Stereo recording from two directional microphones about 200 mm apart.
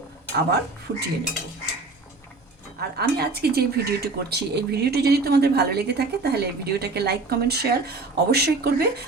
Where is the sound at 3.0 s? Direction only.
50° right (ahead or behind).